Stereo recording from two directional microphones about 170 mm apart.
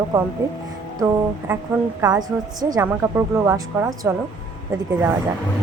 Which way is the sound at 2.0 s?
25° right (ahead or behind).